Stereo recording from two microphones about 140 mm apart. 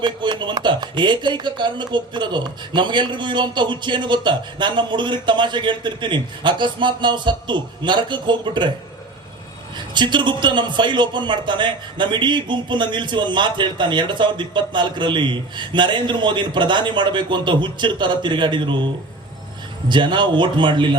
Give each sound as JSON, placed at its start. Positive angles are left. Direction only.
{"t": 0.0, "sound": "a man's voice", "side_deg": -35}
{"t": 9.9, "sound": "a man's voice", "side_deg": -35}
{"t": 19.9, "sound": "a man's voice", "side_deg": -35}